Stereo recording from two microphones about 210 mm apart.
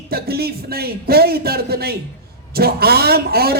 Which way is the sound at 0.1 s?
50° right (ahead or behind).